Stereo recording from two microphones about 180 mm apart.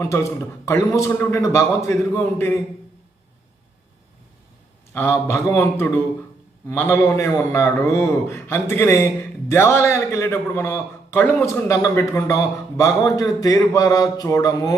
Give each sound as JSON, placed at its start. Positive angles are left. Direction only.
{"t": 0.0, "sound": "a man's voice", "side_deg": 15}
{"t": 4.9, "sound": "a man's voice", "side_deg": 15}